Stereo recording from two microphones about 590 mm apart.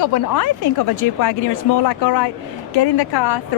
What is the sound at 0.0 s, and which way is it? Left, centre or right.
Speech, left.